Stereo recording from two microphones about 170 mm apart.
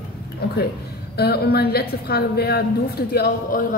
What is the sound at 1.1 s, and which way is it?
A woman's voice, 65° left (ahead or behind).